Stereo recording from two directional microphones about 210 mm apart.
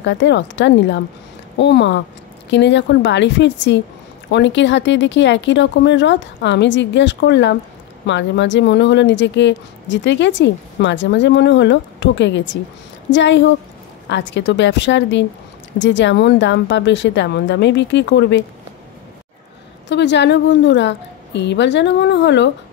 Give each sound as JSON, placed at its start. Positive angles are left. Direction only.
{"t": 0.0, "sound": "speech", "side_deg": 55}
{"t": 19.9, "sound": "speech", "side_deg": 55}